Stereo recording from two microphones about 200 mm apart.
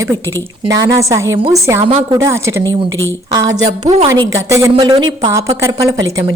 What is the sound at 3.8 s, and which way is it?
Speech, 30° right (ahead or behind).